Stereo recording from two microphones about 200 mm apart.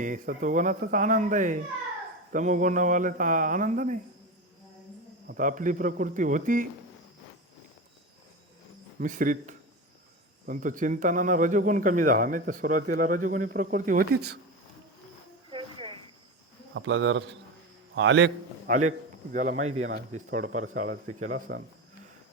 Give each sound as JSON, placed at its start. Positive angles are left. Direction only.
{"t": 0.0, "sound": "a man's voice", "side_deg": -40}
{"t": 5.3, "sound": "a man's voice", "side_deg": -40}
{"t": 9.0, "sound": "a man's voice", "side_deg": -40}
{"t": 15.4, "sound": "a sound", "side_deg": -25}
{"t": 16.7, "sound": "a man's voice", "side_deg": -85}
{"t": 18.7, "sound": "a man's voice", "side_deg": -40}
{"t": 20.7, "sound": "speech", "side_deg": -90}
{"t": 21.2, "sound": "a man's voice", "side_deg": -40}